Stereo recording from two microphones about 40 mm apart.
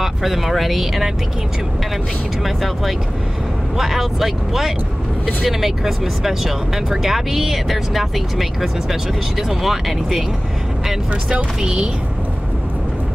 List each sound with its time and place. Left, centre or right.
0.0 s speech: centre
2.4 s speech: centre
11.6 s a woman's voice: right